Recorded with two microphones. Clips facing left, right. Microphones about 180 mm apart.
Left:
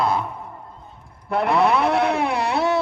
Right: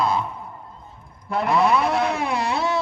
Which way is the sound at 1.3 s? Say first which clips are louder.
Left 1 dB; 60° left (ahead or behind).